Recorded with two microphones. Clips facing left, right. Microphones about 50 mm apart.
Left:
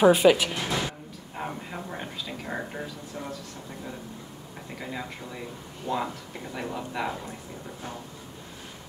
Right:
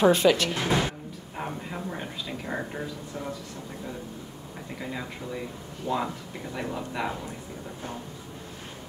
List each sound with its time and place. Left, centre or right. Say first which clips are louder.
0.0 s speech: left 2 dB; centre
0.6 s music: right 4 dB; right
1.3 s a sound: even; centre
4.7 s speech: even; centre